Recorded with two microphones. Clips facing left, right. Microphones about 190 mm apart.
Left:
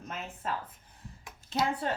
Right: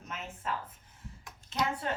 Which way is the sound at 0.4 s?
35° left (ahead or behind).